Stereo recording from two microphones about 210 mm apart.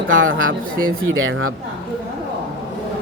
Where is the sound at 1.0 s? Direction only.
70° right (ahead or behind).